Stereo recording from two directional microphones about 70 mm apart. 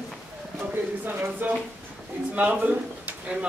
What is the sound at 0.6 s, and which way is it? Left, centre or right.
Speech, right.